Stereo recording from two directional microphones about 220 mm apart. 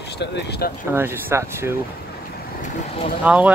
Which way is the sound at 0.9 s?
10° right (ahead or behind).